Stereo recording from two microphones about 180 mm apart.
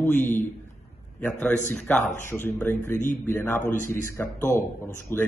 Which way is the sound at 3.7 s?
45° left (ahead or behind).